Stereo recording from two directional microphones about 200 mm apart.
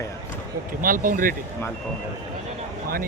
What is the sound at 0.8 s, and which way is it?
Speech, 45° right (ahead or behind).